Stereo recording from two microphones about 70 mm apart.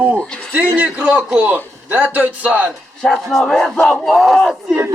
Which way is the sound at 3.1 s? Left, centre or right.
Centre.